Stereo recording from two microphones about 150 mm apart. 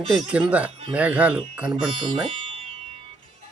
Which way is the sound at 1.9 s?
35° right (ahead or behind).